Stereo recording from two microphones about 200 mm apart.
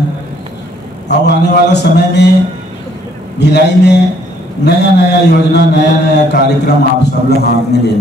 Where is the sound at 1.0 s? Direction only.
60° left (ahead or behind).